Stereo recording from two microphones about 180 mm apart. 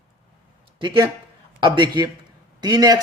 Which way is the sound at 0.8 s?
25° right (ahead or behind).